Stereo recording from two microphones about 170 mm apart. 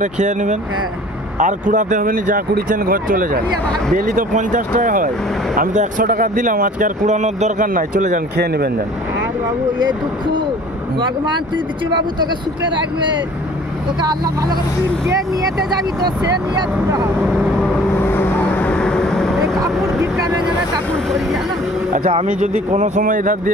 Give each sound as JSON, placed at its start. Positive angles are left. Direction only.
{"t": 0.0, "sound": "speech", "side_deg": -45}
{"t": 9.7, "sound": "speech", "side_deg": -25}
{"t": 11.0, "sound": "speech", "side_deg": -25}
{"t": 14.0, "sound": "speech", "side_deg": -25}
{"t": 16.5, "sound": "speech", "side_deg": -20}
{"t": 17.9, "sound": "vehicle", "side_deg": 15}
{"t": 22.4, "sound": "speech", "side_deg": -45}